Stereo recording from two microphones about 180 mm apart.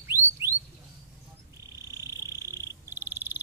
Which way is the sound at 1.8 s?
15° right (ahead or behind).